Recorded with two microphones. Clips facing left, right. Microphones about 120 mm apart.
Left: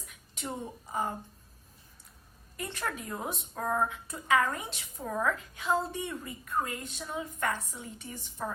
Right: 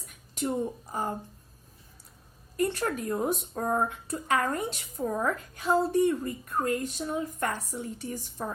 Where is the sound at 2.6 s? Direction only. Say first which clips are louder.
Right 8 dB; 45° right (ahead or behind).